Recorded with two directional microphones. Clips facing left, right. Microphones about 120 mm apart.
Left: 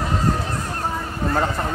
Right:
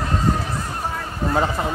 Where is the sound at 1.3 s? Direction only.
5° right (ahead or behind).